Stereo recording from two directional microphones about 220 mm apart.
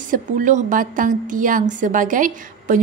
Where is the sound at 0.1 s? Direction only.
35° right (ahead or behind).